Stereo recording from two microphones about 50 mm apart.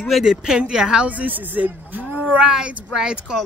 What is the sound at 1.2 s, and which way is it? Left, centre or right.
Speech, right.